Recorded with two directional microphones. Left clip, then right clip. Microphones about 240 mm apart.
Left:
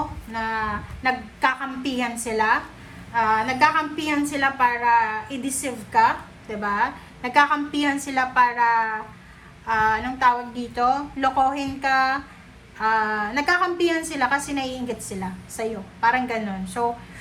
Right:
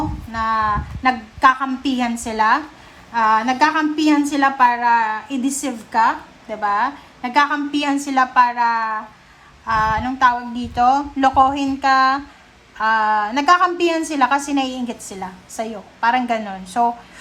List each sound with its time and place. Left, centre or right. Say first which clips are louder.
0.3 s a woman's voice: right 7 dB; centre